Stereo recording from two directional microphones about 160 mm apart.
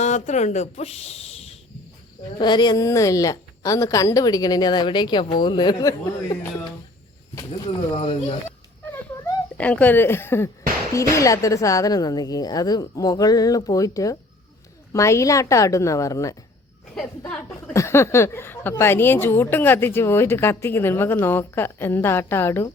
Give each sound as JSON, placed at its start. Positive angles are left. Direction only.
{"t": 0.0, "sound": "speech", "side_deg": 45}
{"t": 2.4, "sound": "a woman's voice", "side_deg": 30}
{"t": 7.9, "sound": "speech", "side_deg": 40}
{"t": 9.6, "sound": "a woman's voice", "side_deg": 10}
{"t": 16.9, "sound": "a woman's voice", "side_deg": 5}
{"t": 17.7, "sound": "a woman's voice", "side_deg": 15}